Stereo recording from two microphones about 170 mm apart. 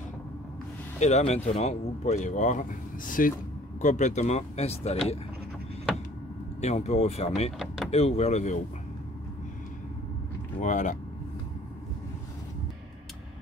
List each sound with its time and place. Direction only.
0.9 s speech: 40° left (ahead or behind)
6.6 s speech: 40° left (ahead or behind)
7.5 s speech: 5° right (ahead or behind)
7.9 s speech: 40° left (ahead or behind)
10.6 s speech: 45° left (ahead or behind)